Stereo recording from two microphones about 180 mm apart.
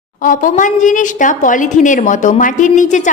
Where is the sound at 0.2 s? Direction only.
45° left (ahead or behind).